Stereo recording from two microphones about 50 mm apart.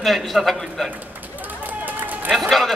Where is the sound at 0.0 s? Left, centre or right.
Centre.